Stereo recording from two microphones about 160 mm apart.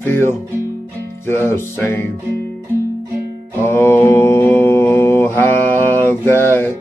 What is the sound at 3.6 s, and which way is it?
Mantra, 15° left (ahead or behind).